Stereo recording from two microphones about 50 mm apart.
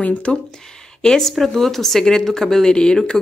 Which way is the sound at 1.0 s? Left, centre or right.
Centre.